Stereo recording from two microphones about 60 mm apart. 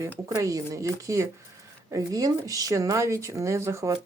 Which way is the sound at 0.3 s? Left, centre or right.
Right.